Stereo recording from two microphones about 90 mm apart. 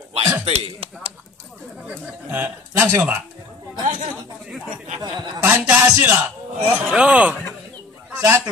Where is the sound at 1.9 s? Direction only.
20° right (ahead or behind).